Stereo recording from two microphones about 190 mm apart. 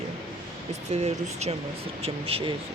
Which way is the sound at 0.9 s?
35° right (ahead or behind).